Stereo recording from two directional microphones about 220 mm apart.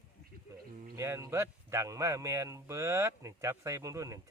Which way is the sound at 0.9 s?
10° right (ahead or behind).